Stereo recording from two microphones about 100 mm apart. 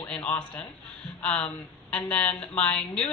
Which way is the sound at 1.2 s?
10° left (ahead or behind).